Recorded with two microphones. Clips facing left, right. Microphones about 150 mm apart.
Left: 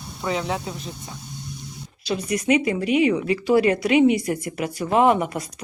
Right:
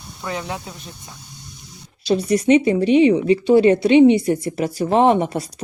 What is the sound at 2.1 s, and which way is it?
Speech, 30° right (ahead or behind).